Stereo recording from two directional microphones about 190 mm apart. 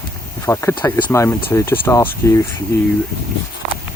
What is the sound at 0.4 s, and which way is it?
Speech, 15° left (ahead or behind).